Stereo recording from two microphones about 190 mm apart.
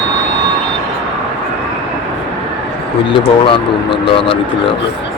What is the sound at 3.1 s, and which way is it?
Speech, 25° left (ahead or behind).